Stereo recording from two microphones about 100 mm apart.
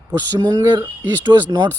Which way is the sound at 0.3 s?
40° right (ahead or behind).